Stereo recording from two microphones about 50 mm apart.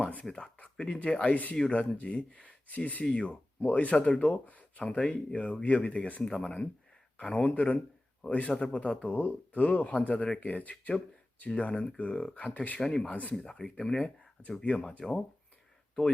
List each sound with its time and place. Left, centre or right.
0.0 s a sound: left
0.3 s speech: left
1.3 s speech: left
6.2 s speech: centre